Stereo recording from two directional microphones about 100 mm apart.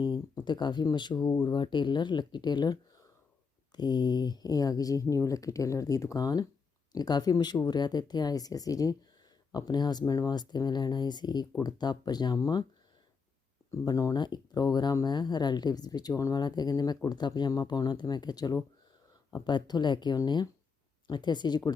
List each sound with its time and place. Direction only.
0.0 s a woman's voice: 50° left (ahead or behind)
3.8 s a woman's voice: 45° left (ahead or behind)
13.7 s a woman's voice: 35° left (ahead or behind)